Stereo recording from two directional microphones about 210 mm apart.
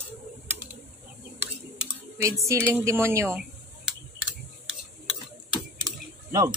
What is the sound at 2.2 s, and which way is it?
A woman's voice, 15° right (ahead or behind).